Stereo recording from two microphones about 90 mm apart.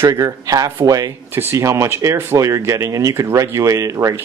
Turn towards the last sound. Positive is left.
turn(degrees=-35)  # may be behind; listen again after turning